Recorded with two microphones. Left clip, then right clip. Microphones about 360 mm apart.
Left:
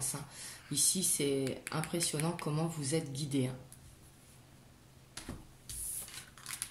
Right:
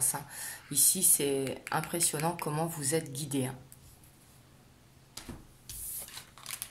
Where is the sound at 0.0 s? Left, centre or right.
Right.